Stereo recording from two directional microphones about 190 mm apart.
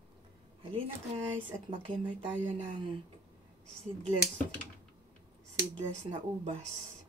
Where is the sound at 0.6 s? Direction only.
30° right (ahead or behind).